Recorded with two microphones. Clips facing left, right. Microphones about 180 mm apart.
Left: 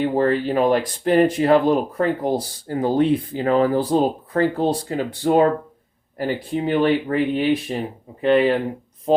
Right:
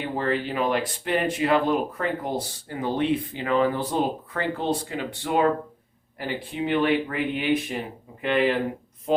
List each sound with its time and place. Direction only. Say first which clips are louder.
0.0 s speech: left 7 dB; 40° left (ahead or behind)